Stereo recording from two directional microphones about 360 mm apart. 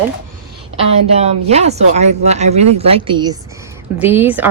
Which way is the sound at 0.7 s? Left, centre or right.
Centre.